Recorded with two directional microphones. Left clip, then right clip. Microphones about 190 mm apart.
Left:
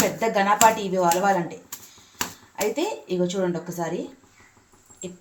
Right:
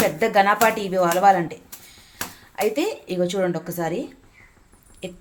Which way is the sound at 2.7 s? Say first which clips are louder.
Right 2 dB; 55° right (ahead or behind).